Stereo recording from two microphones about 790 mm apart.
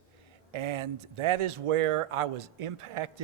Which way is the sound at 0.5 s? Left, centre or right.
Right.